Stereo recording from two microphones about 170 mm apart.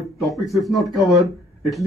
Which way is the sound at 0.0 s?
Centre (ahead or behind).